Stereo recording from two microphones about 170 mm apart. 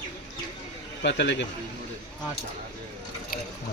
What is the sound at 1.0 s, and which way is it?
Speech, 90° left.